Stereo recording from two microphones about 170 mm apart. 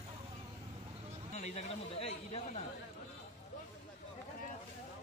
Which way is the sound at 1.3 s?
40° left (ahead or behind).